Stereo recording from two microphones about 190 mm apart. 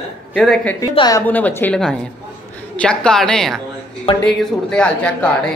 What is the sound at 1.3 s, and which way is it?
A woman's voice, 10° left (ahead or behind).